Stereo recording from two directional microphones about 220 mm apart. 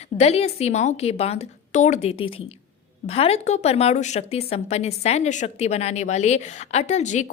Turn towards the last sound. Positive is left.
turn(degrees=35)  # may be behind; listen again after turning